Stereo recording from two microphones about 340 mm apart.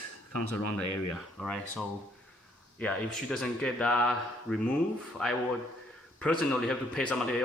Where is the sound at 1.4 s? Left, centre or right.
Centre.